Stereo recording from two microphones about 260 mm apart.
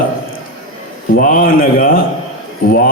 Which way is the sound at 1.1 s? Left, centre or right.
Left.